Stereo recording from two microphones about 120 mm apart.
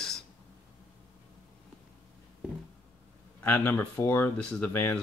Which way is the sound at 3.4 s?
15° left (ahead or behind).